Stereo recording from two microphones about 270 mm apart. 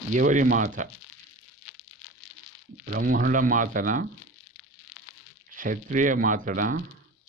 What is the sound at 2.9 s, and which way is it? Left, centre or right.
Speech, right.